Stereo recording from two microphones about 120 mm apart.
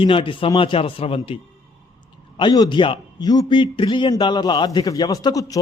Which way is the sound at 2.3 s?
35° left (ahead or behind).